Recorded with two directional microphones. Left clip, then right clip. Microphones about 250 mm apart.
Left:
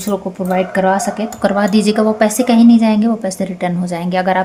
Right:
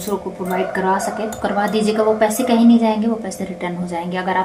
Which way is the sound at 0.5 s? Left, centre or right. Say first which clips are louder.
Left 4 dB; left.